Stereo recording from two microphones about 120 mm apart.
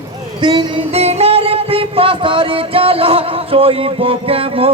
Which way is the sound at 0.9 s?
60° right (ahead or behind).